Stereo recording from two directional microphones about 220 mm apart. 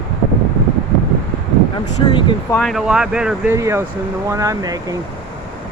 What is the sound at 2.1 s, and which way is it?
Speech, 20° left (ahead or behind).